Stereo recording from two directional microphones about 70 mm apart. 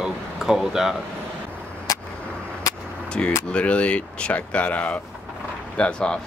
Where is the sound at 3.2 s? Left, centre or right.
Centre.